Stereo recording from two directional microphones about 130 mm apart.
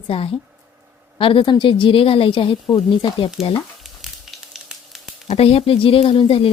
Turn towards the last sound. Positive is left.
turn(degrees=45)  # may be behind; listen again after turning